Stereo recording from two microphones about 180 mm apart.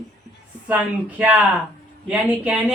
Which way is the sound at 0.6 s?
10° right (ahead or behind).